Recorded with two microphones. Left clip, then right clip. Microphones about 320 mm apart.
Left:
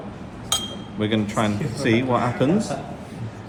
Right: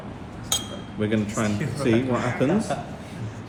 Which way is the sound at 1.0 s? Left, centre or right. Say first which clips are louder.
Left 3 dB; left.